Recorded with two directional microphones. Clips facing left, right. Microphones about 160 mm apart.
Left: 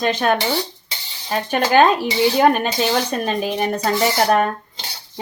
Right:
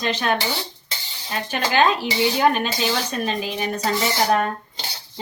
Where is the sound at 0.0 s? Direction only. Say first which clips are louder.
Left 4 dB; 50° left (ahead or behind).